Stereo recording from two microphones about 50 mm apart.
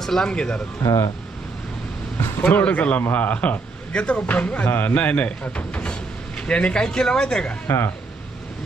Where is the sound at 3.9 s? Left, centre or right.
Left.